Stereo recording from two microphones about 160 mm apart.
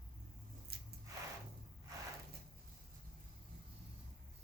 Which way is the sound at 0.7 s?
75° right (ahead or behind).